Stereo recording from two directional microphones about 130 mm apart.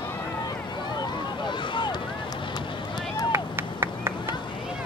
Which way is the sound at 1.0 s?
35° left (ahead or behind).